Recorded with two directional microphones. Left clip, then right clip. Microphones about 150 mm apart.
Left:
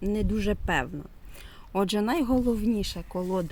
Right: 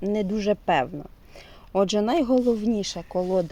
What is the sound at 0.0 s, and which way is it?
Speech, 35° left (ahead or behind).